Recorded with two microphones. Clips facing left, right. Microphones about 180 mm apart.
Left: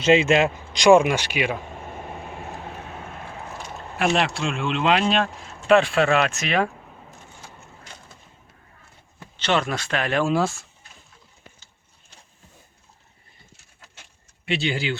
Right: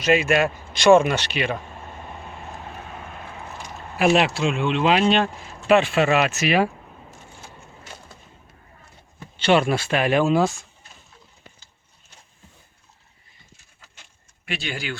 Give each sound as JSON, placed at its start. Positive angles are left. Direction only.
{"t": 0.0, "sound": "speech", "side_deg": 25}
{"t": 3.9, "sound": "speech", "side_deg": -5}
{"t": 9.4, "sound": "speech", "side_deg": -10}
{"t": 14.4, "sound": "speech", "side_deg": 25}